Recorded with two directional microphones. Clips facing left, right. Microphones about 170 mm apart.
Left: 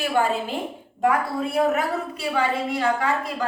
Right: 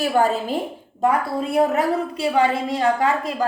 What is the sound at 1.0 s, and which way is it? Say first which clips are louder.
A woman's voice: right 2 dB; 30° right (ahead or behind).